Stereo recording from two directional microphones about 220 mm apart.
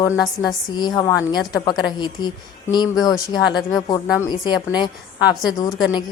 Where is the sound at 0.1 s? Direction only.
Centre (ahead or behind).